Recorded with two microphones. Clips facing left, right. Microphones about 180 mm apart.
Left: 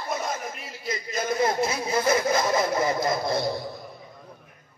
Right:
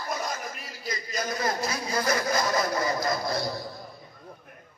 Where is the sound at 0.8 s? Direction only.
25° left (ahead or behind).